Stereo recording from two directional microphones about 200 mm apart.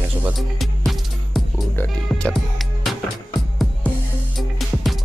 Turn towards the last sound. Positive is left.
turn(degrees=0)  # may be behind; listen again after turning